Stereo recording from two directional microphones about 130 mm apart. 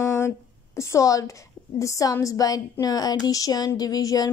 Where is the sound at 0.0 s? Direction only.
20° left (ahead or behind).